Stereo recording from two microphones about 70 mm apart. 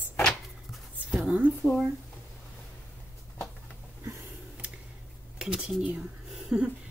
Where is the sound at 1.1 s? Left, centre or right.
Centre.